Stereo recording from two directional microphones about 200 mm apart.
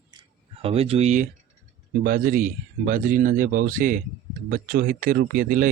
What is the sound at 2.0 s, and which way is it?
Speech, 45° right (ahead or behind).